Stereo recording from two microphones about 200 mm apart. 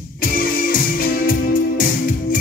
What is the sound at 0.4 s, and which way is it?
Music, 45° left (ahead or behind).